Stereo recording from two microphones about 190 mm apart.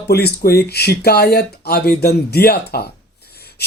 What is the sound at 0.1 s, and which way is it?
Speech, 55° left (ahead or behind).